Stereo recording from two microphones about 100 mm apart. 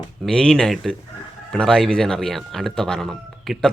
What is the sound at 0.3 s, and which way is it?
Speech, 5° left (ahead or behind).